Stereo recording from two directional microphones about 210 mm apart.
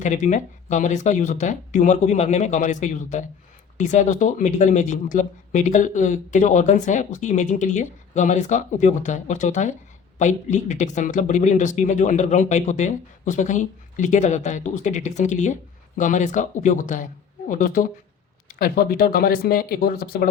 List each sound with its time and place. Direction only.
0.0 s speech: 35° left (ahead or behind)